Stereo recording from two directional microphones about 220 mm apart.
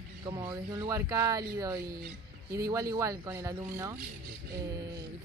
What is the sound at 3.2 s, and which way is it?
Speech, 15° right (ahead or behind).